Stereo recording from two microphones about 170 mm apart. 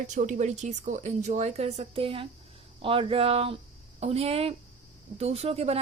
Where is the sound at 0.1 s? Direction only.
45° right (ahead or behind).